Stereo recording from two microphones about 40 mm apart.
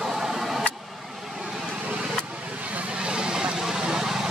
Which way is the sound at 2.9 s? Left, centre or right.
Right.